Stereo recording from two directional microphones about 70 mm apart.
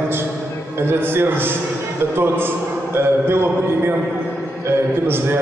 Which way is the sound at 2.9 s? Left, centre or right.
Right.